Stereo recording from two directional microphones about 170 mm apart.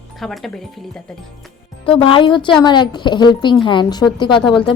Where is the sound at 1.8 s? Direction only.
30° left (ahead or behind).